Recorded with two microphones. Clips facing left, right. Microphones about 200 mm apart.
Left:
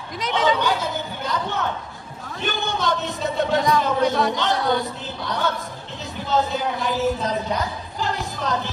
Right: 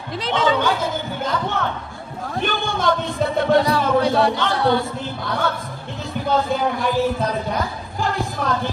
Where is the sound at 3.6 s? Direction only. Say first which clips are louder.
Right 2 dB; 30° right (ahead or behind).